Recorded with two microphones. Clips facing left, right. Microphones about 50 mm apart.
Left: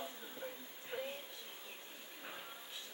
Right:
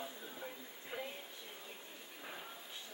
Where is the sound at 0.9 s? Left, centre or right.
Centre.